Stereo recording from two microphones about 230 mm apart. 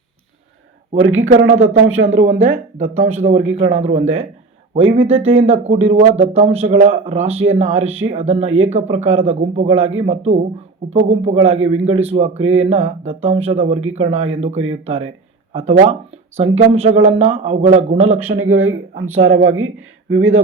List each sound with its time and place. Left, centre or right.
0.9 s speech: right
2.1 s speech: right
2.9 s speech: right
3.3 s speech: right
12.4 s speech: right
13.0 s speech: right
18.3 s speech: right